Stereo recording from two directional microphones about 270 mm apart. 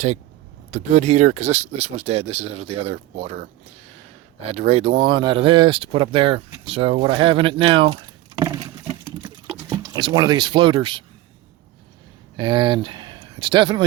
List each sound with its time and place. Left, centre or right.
0.7 s speech: right
4.5 s speech: right
8.4 s a sound: centre
9.2 s liquid: centre
12.4 s speech: centre